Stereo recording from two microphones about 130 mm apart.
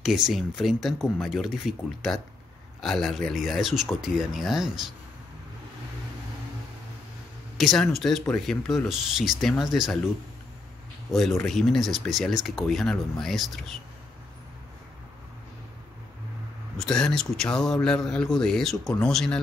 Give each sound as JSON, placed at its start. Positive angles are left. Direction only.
{"t": 0.0, "sound": "speech", "side_deg": -5}
{"t": 7.5, "sound": "speech", "side_deg": 0}
{"t": 11.1, "sound": "speech", "side_deg": 0}
{"t": 16.7, "sound": "speech", "side_deg": 5}